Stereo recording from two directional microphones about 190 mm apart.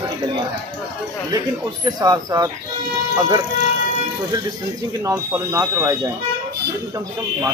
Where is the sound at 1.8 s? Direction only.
20° right (ahead or behind).